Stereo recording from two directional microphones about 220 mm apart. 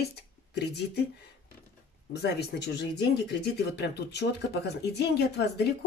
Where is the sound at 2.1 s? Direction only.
50° left (ahead or behind).